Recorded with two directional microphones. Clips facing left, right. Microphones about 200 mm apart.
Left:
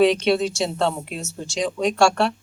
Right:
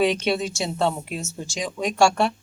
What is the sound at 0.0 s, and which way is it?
Speech, 5° right (ahead or behind).